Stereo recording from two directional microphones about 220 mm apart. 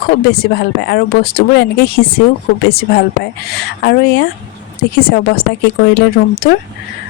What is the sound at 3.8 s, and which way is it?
Speech, 45° left (ahead or behind).